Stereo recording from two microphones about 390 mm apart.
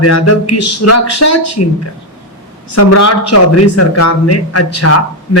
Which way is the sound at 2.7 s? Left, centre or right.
Left.